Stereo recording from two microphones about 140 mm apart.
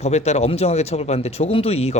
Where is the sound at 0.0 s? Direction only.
50° left (ahead or behind).